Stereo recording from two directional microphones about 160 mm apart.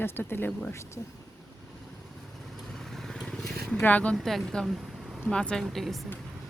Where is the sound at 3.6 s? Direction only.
5° left (ahead or behind).